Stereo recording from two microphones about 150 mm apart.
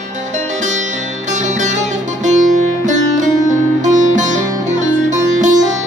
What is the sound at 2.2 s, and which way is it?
Music, 55° right (ahead or behind).